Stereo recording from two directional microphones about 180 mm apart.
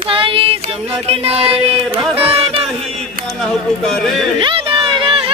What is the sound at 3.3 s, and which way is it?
Speech, 5° left (ahead or behind).